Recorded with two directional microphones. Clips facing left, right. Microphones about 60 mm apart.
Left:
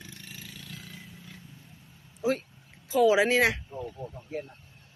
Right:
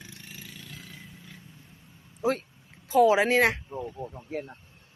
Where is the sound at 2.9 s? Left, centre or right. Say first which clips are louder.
Right 2 dB; right.